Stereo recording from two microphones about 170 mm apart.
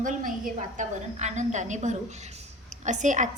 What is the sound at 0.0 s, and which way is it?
A woman's voice, 50° right (ahead or behind).